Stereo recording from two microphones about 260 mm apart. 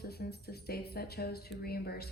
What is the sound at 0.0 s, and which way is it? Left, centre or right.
A woman's voice, left.